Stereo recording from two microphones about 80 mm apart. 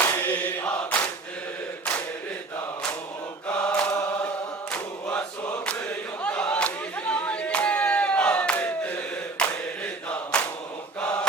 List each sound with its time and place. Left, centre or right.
0.0 s chant: left
3.6 s mantra: centre
5.1 s choir: centre
6.2 s a sound: centre
9.4 s choir: centre